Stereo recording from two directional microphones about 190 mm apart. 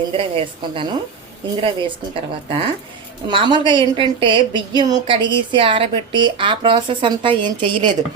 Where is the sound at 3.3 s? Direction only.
25° right (ahead or behind).